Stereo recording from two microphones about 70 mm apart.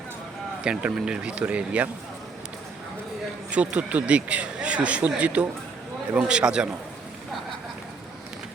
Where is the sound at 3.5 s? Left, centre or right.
Centre.